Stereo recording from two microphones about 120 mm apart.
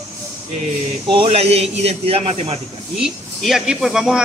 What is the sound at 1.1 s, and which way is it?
A man's voice, 55° right (ahead or behind).